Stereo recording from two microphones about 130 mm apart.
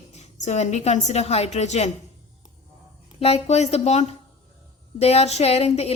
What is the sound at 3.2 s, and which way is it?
A woman's voice, 55° left (ahead or behind).